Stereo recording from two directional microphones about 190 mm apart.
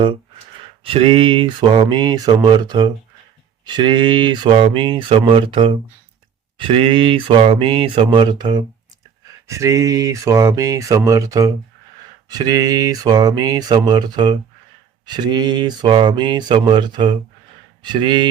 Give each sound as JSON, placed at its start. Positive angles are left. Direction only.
{"t": 0.9, "sound": "speech", "side_deg": -30}